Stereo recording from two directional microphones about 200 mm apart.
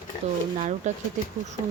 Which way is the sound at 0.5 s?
40° right (ahead or behind).